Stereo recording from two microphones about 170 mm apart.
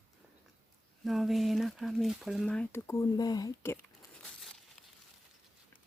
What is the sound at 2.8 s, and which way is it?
Speech, 20° left (ahead or behind).